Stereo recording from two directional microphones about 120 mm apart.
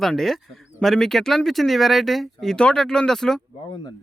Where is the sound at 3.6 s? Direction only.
40° left (ahead or behind).